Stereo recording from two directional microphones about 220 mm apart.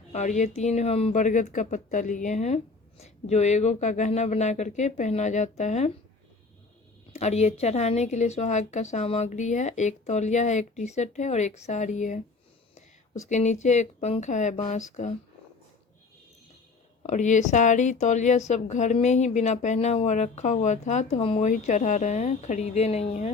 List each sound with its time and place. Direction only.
0.1 s a woman's voice: 30° left (ahead or behind)
7.1 s a woman's voice: 30° left (ahead or behind)
17.0 s a woman's voice: 30° left (ahead or behind)